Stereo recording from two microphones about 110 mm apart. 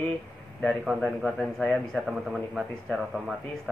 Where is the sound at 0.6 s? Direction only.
Centre (ahead or behind).